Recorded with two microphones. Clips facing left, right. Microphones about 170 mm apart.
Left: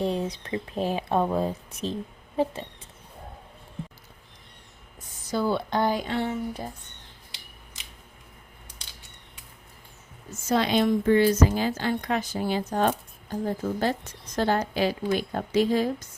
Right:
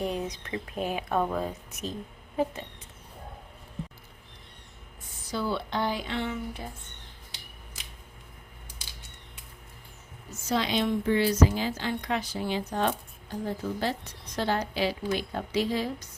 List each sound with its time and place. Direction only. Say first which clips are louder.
0.0 s speech: left 4 dB; 30° left (ahead or behind)
5.3 s a woman's voice: left 5 dB; 45° left (ahead or behind)
10.5 s a woman's voice: left 4 dB; 50° left (ahead or behind)